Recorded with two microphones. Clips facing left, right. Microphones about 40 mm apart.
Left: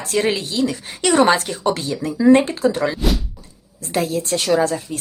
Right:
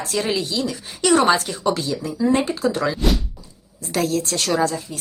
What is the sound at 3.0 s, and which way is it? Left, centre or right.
Speech, centre.